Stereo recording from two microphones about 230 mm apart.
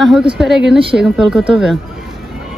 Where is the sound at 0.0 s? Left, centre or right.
Centre.